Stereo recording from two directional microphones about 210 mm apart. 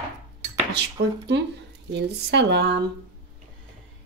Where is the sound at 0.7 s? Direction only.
55° right (ahead or behind).